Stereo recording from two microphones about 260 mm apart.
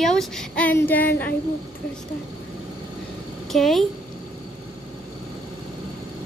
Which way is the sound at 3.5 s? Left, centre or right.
Centre.